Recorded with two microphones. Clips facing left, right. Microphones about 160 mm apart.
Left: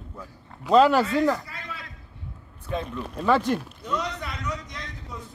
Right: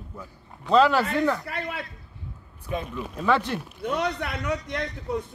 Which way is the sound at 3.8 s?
60° right (ahead or behind).